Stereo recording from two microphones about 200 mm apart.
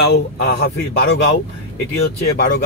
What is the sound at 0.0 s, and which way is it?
Speech, 55° left (ahead or behind).